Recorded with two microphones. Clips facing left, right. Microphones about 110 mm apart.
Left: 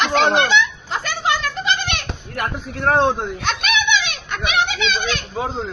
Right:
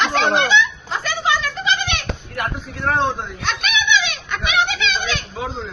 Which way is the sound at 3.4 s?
65° left (ahead or behind).